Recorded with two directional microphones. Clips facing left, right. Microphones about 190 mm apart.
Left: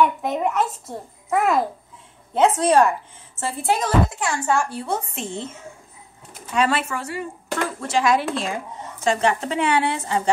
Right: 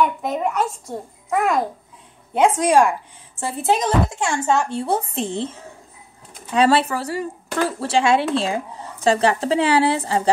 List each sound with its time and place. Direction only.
0.0 s a child's voice: centre (ahead or behind)
2.3 s speech: 15° right (ahead or behind); by 10.3 s 35° right (ahead or behind)